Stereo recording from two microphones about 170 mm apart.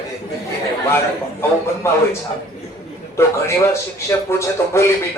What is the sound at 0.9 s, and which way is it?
A man's voice, 15° left (ahead or behind).